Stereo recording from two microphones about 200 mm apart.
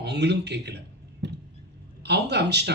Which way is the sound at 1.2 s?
60° right (ahead or behind).